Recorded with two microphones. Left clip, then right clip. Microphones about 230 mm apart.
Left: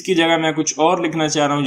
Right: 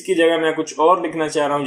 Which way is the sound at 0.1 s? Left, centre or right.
Left.